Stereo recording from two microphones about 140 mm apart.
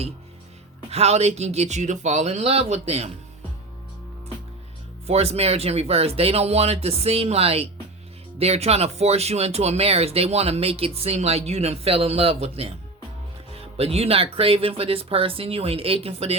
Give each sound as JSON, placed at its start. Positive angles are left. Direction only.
{"t": 0.9, "sound": "speech", "side_deg": -50}
{"t": 5.0, "sound": "speech", "side_deg": -50}